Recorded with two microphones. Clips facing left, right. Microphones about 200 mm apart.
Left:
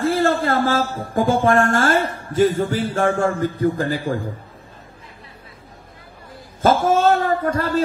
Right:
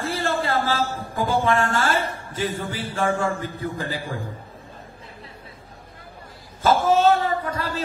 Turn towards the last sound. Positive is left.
turn(degrees=45)  # may be behind; listen again after turning